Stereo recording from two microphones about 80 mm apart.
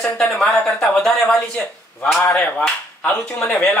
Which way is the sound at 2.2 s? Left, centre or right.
Left.